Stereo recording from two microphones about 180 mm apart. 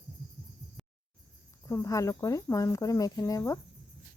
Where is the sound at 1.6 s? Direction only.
15° left (ahead or behind).